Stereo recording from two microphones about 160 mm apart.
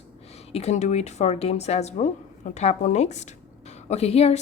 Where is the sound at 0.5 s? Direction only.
45° left (ahead or behind).